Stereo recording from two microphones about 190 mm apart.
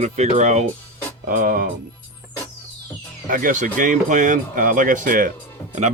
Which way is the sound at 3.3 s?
45° right (ahead or behind).